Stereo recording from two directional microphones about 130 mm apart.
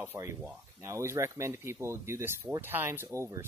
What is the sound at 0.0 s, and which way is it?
Speech, 20° right (ahead or behind).